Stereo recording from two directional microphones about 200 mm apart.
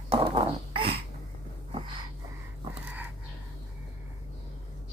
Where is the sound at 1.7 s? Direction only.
25° right (ahead or behind).